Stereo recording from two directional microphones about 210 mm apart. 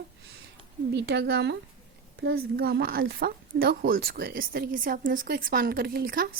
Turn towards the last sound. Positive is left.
turn(degrees=-45)  # may be behind; listen again after turning